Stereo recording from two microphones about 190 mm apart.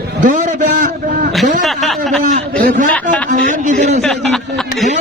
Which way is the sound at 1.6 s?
Centre (ahead or behind).